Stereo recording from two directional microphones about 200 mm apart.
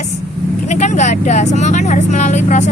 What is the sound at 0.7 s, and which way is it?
Speech, 35° left (ahead or behind).